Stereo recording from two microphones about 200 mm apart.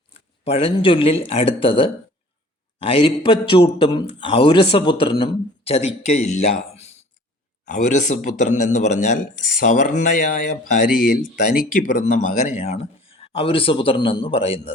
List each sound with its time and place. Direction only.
0.1 s a man's voice: 30° left (ahead or behind)